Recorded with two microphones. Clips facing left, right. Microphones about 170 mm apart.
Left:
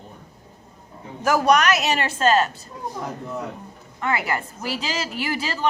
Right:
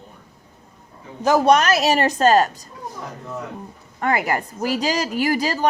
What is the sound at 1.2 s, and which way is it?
A woman's voice, 25° right (ahead or behind).